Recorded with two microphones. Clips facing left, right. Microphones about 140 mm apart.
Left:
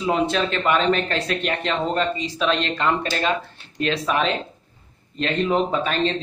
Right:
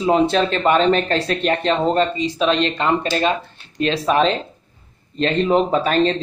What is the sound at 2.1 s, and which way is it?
A man's voice, 20° right (ahead or behind).